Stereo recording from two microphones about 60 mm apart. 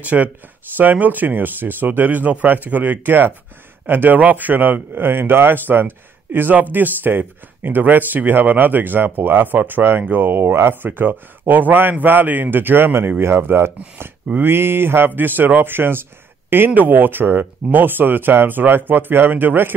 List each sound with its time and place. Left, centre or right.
0.0 s speech: right